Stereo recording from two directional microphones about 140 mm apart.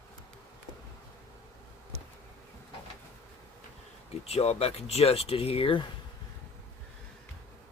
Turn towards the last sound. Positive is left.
turn(degrees=40)  # may be behind; listen again after turning